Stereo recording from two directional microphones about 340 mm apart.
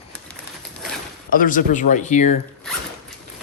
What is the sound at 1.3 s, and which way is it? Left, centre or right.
Speech, left.